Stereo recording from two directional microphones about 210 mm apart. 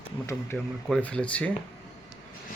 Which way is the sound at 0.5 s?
5° left (ahead or behind).